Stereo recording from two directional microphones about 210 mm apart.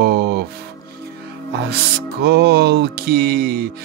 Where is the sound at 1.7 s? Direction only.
50° right (ahead or behind).